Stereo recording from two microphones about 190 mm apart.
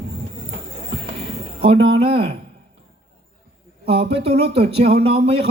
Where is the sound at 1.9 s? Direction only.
30° right (ahead or behind).